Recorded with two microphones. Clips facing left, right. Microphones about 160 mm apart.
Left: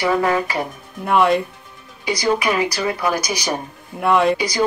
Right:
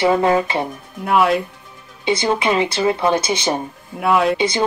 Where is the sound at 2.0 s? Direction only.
25° right (ahead or behind).